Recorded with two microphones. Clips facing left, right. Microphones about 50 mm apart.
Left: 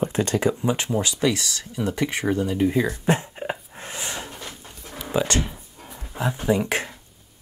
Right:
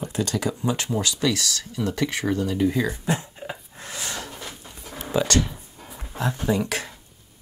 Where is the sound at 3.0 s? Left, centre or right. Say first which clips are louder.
Left 4 dB; left.